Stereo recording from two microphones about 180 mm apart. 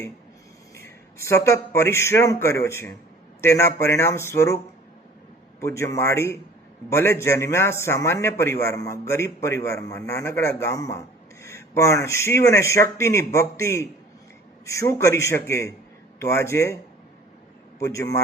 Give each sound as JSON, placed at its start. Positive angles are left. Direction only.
{"t": 0.8, "sound": "a man's voice", "side_deg": 15}
{"t": 5.5, "sound": "a man's voice", "side_deg": 15}
{"t": 17.7, "sound": "a man's voice", "side_deg": 15}